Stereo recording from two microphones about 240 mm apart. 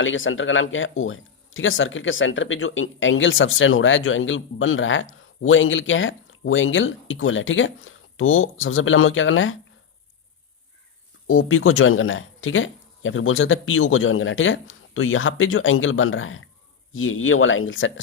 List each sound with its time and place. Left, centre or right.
0.0 s speech: left
11.3 s speech: left